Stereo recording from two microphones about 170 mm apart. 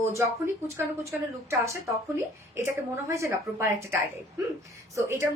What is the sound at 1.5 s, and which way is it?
A woman's voice, 15° right (ahead or behind).